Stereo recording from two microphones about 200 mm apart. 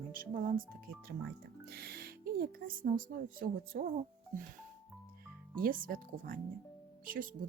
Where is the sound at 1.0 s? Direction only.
50° right (ahead or behind).